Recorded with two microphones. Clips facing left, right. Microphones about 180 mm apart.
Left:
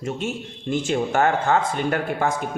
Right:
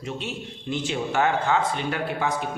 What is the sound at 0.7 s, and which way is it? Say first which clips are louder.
Speech: left 5 dB; 45° left (ahead or behind).